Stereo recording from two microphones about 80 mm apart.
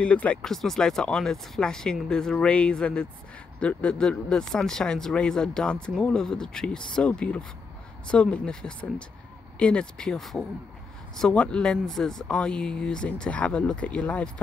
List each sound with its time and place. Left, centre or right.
0.0 s speech: centre
0.4 s speech: centre